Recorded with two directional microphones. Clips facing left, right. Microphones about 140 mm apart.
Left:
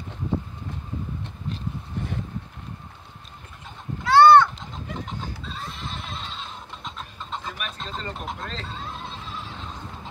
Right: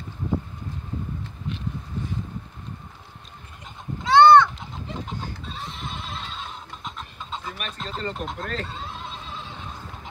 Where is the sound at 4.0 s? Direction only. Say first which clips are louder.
Even; 20° right (ahead or behind).